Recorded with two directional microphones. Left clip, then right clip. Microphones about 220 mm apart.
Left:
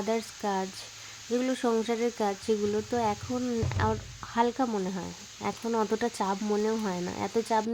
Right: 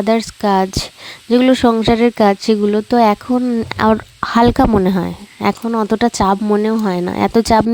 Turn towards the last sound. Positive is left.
turn(degrees=-50)  # may be behind; listen again after turning